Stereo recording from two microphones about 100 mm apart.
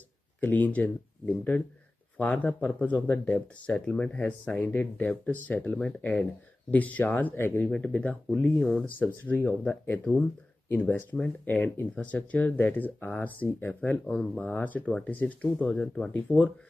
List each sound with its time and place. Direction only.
0.4 s speech: 15° left (ahead or behind)